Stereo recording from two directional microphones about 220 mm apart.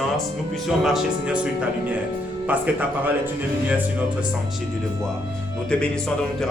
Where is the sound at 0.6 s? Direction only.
Centre (ahead or behind).